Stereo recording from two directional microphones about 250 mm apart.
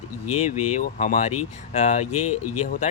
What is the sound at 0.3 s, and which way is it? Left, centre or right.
Speech, left.